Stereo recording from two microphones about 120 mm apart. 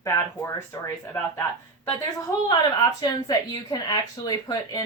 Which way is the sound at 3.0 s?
35° left (ahead or behind).